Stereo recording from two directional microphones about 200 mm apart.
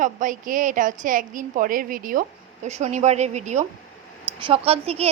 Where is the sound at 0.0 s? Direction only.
40° right (ahead or behind).